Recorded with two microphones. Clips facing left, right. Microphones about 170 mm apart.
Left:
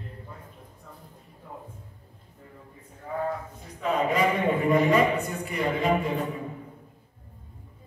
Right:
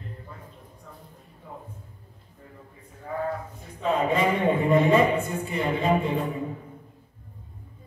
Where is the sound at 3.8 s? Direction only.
25° right (ahead or behind).